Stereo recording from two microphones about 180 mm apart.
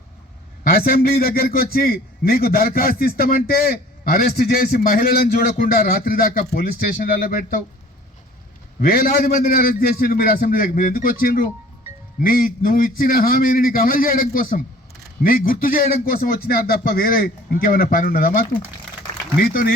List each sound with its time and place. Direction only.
0.6 s a man's voice: 55° left (ahead or behind)
8.8 s a man's voice: 55° left (ahead or behind)